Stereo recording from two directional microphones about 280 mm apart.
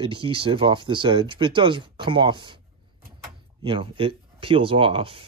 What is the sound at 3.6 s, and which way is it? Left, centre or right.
Speech, centre.